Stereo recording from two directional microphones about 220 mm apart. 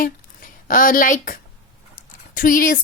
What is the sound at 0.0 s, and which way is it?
A woman's voice, 40° left (ahead or behind).